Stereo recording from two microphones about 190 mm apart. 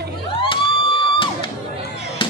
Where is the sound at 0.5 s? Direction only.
25° left (ahead or behind).